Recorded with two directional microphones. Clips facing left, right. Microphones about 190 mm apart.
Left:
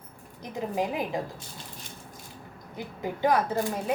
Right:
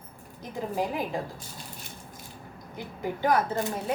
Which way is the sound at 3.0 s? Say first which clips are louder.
Even; 15° left (ahead or behind).